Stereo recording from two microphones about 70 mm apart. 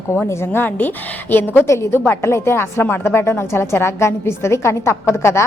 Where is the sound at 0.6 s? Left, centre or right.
Left.